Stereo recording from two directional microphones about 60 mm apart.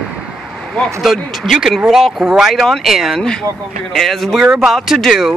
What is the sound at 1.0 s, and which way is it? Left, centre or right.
Speech, centre.